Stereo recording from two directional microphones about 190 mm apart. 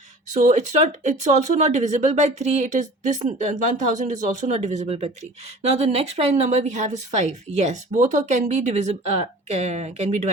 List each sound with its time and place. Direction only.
0.3 s speech: 40° right (ahead or behind)